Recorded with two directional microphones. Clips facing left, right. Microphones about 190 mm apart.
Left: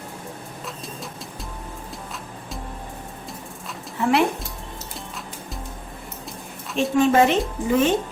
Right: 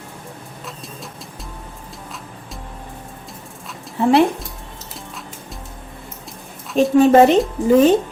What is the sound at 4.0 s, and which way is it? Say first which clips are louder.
Speech: right 6 dB; 30° right (ahead or behind).